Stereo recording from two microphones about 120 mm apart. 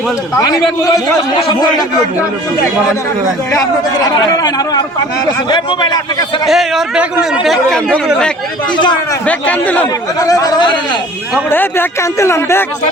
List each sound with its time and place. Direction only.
1.5 s speech: 35° left (ahead or behind)
3.9 s speech: 35° left (ahead or behind)
6.4 s speech: centre (ahead or behind)
8.7 s speech: 40° left (ahead or behind)
9.2 s a man's voice: 10° left (ahead or behind)
10.2 s speech: 30° left (ahead or behind)
11.4 s speech: 15° left (ahead or behind)